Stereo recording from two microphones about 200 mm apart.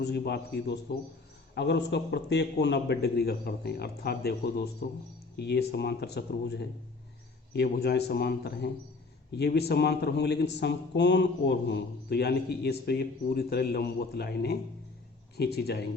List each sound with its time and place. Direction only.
0.0 s a man's voice: 55° left (ahead or behind)